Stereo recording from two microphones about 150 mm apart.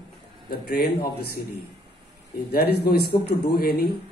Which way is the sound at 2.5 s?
90° left.